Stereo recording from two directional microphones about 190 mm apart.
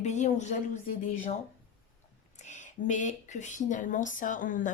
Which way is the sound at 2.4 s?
40° left (ahead or behind).